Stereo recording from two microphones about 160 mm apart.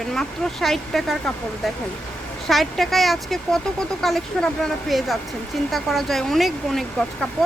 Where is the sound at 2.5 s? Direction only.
Centre (ahead or behind).